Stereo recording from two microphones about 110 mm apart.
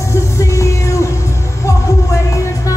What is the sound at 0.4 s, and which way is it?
Music, 25° left (ahead or behind).